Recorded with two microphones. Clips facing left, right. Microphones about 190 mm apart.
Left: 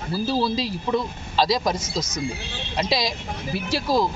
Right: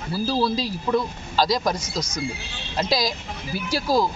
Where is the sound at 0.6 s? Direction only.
Centre (ahead or behind).